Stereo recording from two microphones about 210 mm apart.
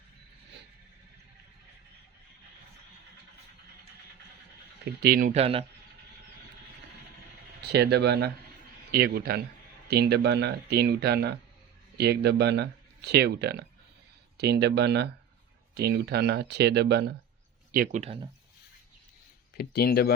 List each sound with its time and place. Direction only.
4.9 s speech: 45° right (ahead or behind)
5.3 s a man's voice: 30° right (ahead or behind)
7.7 s speech: 50° right (ahead or behind)
18.0 s a man's voice: 25° right (ahead or behind)
19.5 s speech: 50° left (ahead or behind)